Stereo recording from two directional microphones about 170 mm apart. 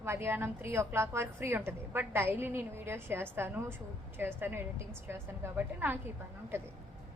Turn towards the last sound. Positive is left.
turn(degrees=-15)  # may be behind; listen again after turning